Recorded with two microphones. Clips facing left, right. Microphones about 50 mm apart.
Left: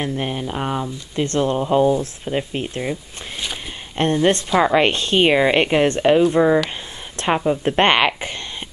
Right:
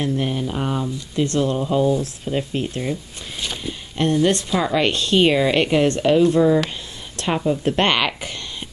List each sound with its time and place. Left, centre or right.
0.0 s speech: left
1.1 s speech: left
3.9 s speech: left